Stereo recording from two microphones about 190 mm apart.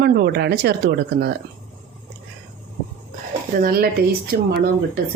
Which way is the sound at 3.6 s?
50° right (ahead or behind).